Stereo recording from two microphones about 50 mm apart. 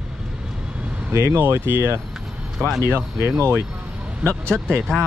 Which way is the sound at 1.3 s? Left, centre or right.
Right.